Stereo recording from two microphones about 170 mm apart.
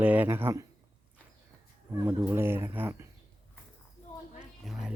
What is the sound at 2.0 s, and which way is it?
Speech, 15° right (ahead or behind).